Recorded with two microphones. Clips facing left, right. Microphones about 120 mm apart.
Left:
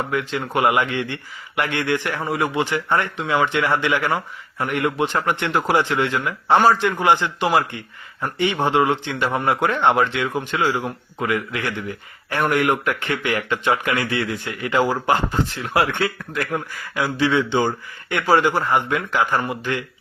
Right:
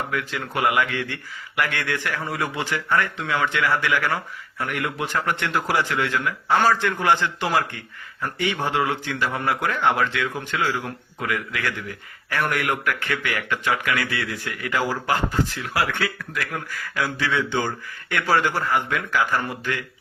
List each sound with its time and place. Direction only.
0.1 s speech: 25° left (ahead or behind)
16.7 s speech: 20° left (ahead or behind)